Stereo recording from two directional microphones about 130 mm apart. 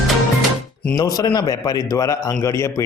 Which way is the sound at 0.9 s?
30° left (ahead or behind).